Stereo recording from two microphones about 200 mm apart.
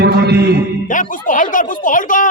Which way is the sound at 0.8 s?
40° left (ahead or behind).